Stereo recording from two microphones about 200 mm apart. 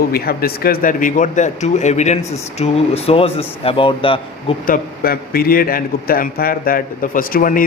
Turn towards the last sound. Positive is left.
turn(degrees=45)  # may be behind; listen again after turning